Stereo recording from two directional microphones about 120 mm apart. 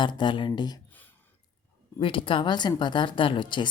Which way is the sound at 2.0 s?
45° left (ahead or behind).